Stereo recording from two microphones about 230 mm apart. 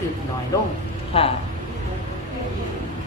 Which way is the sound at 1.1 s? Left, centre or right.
Left.